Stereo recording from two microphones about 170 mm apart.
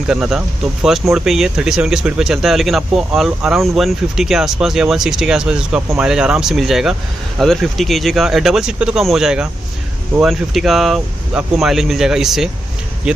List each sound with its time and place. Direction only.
0.0 s speech: 5° right (ahead or behind)